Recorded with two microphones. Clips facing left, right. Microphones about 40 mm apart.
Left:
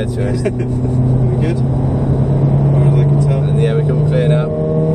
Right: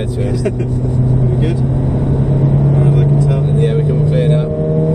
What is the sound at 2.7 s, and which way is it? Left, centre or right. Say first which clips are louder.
Vehicle: right 1 dB; left.